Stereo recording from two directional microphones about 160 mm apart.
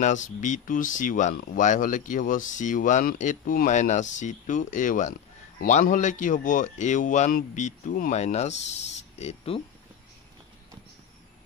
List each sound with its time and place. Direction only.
0.0 s speech: 50° left (ahead or behind)